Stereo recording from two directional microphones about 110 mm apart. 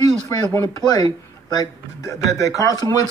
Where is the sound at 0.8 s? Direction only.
40° left (ahead or behind).